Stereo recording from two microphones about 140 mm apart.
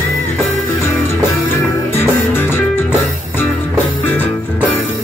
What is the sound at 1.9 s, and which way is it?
Music, 15° left (ahead or behind).